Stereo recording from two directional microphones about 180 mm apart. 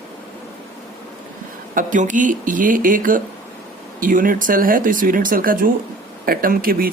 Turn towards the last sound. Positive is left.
turn(degrees=-55)  # may be behind; listen again after turning